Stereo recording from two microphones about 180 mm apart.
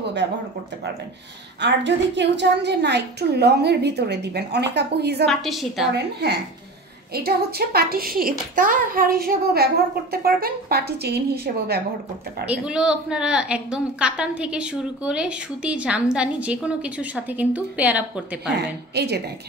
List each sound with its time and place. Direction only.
1.6 s a woman's voice: 75° right (ahead or behind)
5.2 s a woman's voice: centre (ahead or behind)
5.9 s a woman's voice: 70° right (ahead or behind)
12.4 s a woman's voice: 5° right (ahead or behind)
18.9 s a woman's voice: 65° right (ahead or behind)